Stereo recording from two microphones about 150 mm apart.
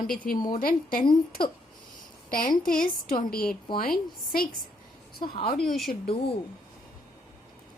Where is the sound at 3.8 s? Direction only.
75° left (ahead or behind).